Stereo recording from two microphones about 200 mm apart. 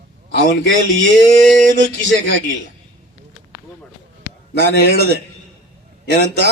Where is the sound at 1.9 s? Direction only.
70° right (ahead or behind).